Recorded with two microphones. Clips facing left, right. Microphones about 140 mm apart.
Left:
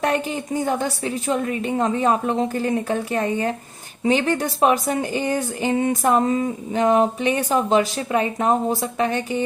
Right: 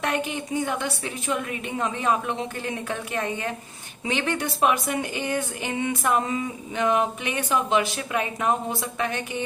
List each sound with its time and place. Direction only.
0.0 s a woman's voice: 35° left (ahead or behind)